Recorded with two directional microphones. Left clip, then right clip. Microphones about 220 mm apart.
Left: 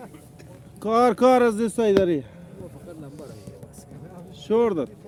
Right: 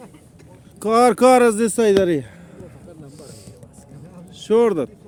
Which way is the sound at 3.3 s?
35° right (ahead or behind).